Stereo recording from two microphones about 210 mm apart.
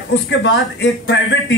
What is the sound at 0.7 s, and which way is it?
Speech, 55° left (ahead or behind).